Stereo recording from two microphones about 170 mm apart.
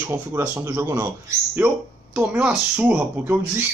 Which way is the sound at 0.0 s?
15° right (ahead or behind).